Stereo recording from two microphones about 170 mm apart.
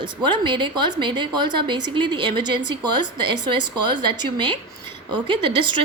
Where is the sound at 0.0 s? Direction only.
25° right (ahead or behind).